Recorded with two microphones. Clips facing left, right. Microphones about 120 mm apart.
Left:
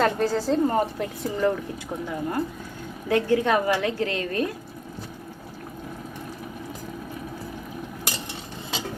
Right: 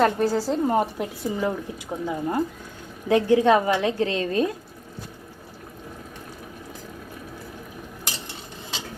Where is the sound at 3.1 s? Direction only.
20° right (ahead or behind).